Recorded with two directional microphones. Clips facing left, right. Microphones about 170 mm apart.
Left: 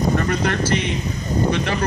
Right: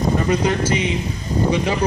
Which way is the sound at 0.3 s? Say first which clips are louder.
Right 2 dB; 10° right (ahead or behind).